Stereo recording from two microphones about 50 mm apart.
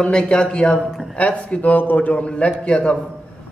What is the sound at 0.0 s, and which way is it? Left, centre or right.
A man's voice, left.